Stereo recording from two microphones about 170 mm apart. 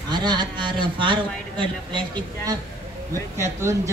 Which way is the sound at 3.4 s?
15° right (ahead or behind).